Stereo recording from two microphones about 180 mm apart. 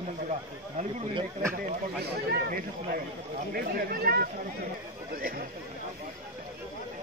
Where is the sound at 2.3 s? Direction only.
55° right (ahead or behind).